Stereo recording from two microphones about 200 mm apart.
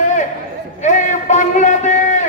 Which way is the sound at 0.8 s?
35° left (ahead or behind).